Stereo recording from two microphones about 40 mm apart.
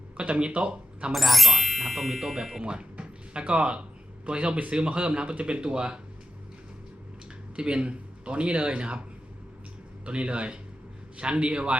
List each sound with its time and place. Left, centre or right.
0.2 s speech: right
1.1 s speech: centre
2.6 s speech: right
7.5 s speech: right
10.1 s speech: right